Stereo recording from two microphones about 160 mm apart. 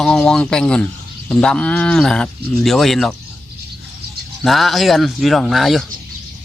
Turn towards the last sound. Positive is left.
turn(degrees=0)  # may be behind; listen again after turning